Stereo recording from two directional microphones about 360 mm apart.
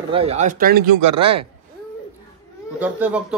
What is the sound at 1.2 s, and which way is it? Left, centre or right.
Speech, centre.